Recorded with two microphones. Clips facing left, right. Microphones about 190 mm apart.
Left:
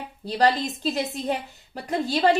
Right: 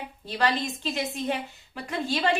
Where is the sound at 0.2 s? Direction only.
40° left (ahead or behind).